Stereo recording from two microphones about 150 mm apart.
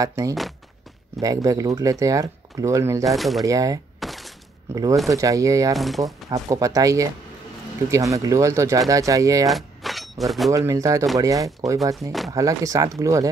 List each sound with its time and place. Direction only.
0.0 s speech: 20° right (ahead or behind)
3.1 s speech: centre (ahead or behind)
3.4 s speech: 25° right (ahead or behind)
4.0 s thunk: centre (ahead or behind)
5.1 s speech: 20° right (ahead or behind)
5.8 s speech: centre (ahead or behind)
6.3 s speech: 20° right (ahead or behind)
9.5 s a sound: centre (ahead or behind)
10.5 s speech: 20° right (ahead or behind)